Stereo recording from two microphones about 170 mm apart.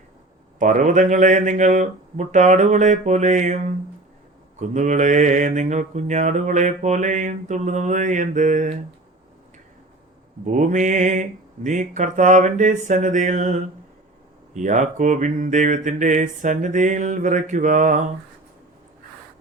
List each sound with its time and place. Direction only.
0.6 s mantra: 50° right (ahead or behind)
4.6 s mantra: 45° right (ahead or behind)
10.4 s mantra: 45° right (ahead or behind)